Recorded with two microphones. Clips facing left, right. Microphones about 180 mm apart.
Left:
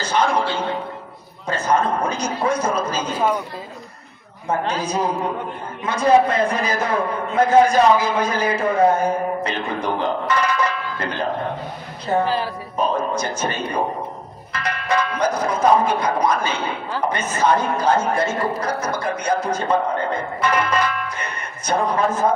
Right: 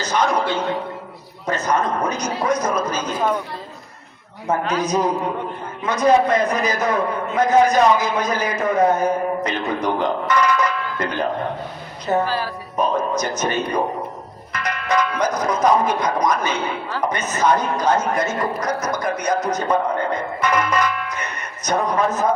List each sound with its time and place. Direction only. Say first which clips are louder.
0.0 s a man's voice: even; 30° left (ahead or behind)
3.0 s speech: left 1 dB; 10° left (ahead or behind)
4.4 s a man's voice: right 2 dB; 30° left (ahead or behind)
12.2 s a man's voice: left 1 dB; 25° left (ahead or behind)